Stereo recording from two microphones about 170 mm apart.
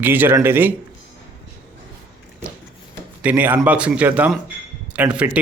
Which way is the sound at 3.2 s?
10° right (ahead or behind).